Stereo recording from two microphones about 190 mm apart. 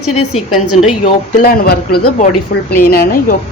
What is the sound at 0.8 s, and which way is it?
A woman's voice, 45° left (ahead or behind).